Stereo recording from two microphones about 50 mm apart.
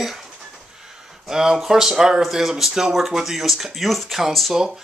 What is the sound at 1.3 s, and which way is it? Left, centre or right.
Speech, centre.